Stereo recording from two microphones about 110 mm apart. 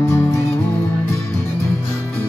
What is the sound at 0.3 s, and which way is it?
Music, 25° left (ahead or behind).